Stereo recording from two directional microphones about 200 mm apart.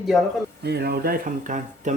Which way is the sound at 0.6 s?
55° right (ahead or behind).